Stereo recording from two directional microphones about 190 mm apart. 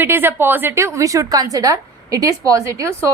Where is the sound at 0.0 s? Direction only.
10° right (ahead or behind).